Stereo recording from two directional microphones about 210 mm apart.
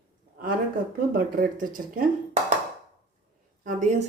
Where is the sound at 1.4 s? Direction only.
40° right (ahead or behind).